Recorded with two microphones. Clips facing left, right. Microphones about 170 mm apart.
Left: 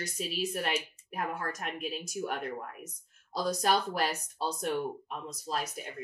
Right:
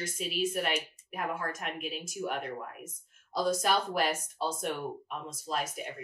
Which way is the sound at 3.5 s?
35° left (ahead or behind).